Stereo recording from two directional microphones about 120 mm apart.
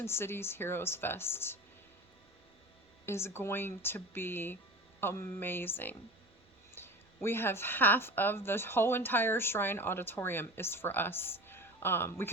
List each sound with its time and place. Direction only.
0.0 s a woman's voice: 20° left (ahead or behind)
3.1 s a woman's voice: 20° left (ahead or behind)